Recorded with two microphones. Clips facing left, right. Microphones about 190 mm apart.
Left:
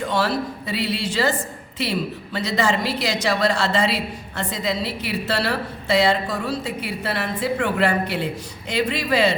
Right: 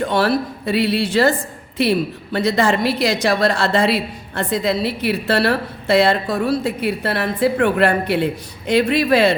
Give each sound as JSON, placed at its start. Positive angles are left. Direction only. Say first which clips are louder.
{"t": 0.1, "sound": "a woman's voice", "louder": "right 4 dB", "side_deg": -60}